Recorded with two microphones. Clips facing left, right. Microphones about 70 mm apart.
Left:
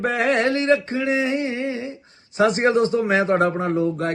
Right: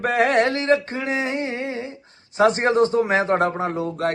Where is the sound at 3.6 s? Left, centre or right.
Right.